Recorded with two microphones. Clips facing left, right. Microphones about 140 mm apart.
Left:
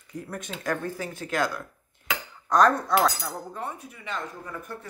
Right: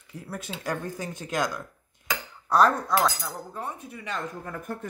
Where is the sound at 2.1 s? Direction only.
5° right (ahead or behind).